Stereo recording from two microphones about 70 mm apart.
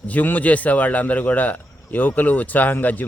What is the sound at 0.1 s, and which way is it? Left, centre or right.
A man's voice, left.